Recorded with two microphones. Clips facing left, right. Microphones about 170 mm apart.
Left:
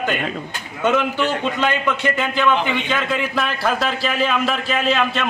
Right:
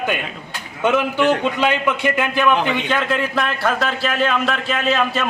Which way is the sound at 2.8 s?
Centre (ahead or behind).